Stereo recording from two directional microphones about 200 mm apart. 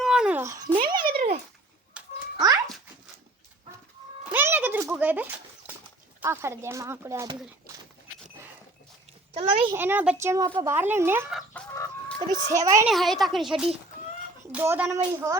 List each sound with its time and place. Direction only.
0.0 s a sound: 5° right (ahead or behind); by 1.0 s 25° right (ahead or behind)
2.4 s cat: 20° right (ahead or behind)
4.2 s chicken: 10° right (ahead or behind)
6.1 s speech: 15° right (ahead or behind)
9.3 s a child's voice: 30° right (ahead or behind)
9.7 s speech: 10° right (ahead or behind)
11.7 s chicken: 15° left (ahead or behind)
12.3 s speech: 15° right (ahead or behind)
12.9 s speech: centre (ahead or behind); by 15.4 s 15° right (ahead or behind)